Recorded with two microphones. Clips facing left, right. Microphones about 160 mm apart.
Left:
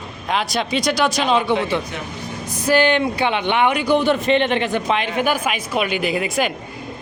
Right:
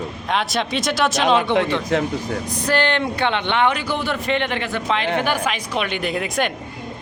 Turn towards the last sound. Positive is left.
turn(degrees=5)  # may be behind; listen again after turning